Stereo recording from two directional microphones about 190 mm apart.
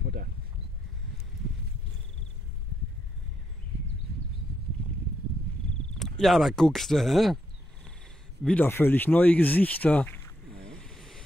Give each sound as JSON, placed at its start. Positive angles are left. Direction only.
{"t": 0.0, "sound": "a sound", "side_deg": -50}
{"t": 5.9, "sound": "speech", "side_deg": 0}
{"t": 8.5, "sound": "speech", "side_deg": 10}
{"t": 10.8, "sound": "vehicle", "side_deg": 5}